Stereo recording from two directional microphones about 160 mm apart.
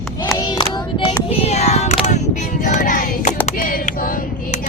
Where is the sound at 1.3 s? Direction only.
40° left (ahead or behind).